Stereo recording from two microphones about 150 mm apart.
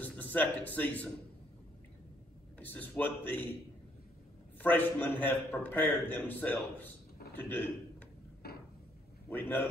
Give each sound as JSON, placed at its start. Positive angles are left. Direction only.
{"t": 0.0, "sound": "a man's voice", "side_deg": 10}
{"t": 2.6, "sound": "a man's voice", "side_deg": 10}
{"t": 4.6, "sound": "a man's voice", "side_deg": 10}
{"t": 8.4, "sound": "cupboard open or close", "side_deg": 90}
{"t": 9.3, "sound": "a man's voice", "side_deg": 15}